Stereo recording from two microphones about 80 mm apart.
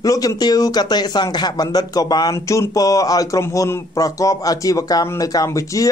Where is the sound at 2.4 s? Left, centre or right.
Left.